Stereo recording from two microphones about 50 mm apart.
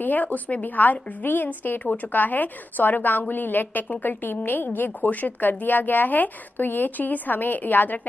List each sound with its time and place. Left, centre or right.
0.0 s a woman's voice: left